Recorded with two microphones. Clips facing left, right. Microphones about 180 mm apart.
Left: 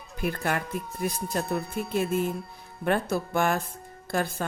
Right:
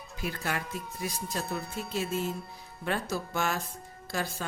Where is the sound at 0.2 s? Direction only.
55° left (ahead or behind).